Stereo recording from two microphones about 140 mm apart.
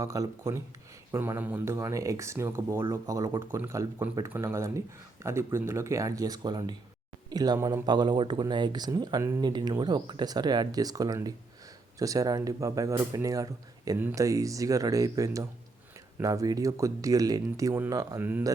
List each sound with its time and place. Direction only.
0.0 s speech: 25° right (ahead or behind)